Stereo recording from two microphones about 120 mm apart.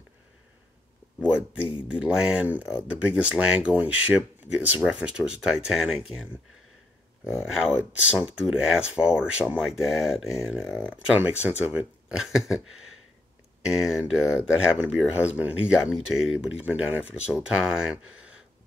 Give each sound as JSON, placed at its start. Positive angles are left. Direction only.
{"t": 1.6, "sound": "speech", "side_deg": 45}
{"t": 1.9, "sound": "speech", "side_deg": -10}
{"t": 7.3, "sound": "speech", "side_deg": -5}
{"t": 13.8, "sound": "speech", "side_deg": -5}